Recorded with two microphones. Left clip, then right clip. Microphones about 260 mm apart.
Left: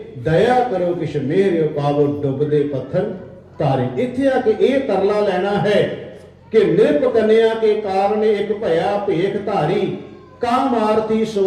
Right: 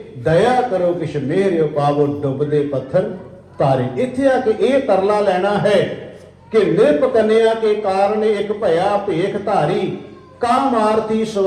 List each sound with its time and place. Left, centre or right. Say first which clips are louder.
0.3 s a man's voice: right 1 dB; right